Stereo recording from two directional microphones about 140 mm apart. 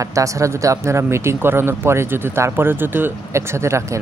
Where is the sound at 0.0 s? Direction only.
25° right (ahead or behind).